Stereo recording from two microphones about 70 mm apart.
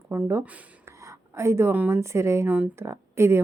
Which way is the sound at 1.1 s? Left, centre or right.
Right.